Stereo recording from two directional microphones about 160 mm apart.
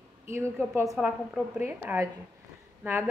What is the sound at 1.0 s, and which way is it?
A woman's voice, 10° right (ahead or behind).